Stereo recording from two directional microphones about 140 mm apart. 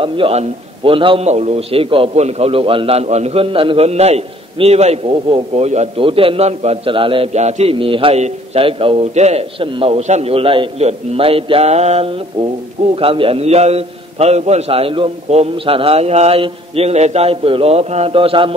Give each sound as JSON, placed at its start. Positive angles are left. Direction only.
{"t": 0.0, "sound": "a man's voice", "side_deg": -45}
{"t": 7.3, "sound": "a man's voice", "side_deg": -50}